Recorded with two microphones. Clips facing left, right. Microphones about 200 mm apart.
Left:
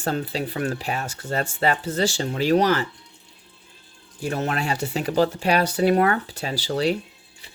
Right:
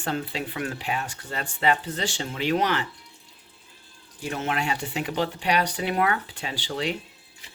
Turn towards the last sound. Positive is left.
turn(degrees=40)  # may be behind; listen again after turning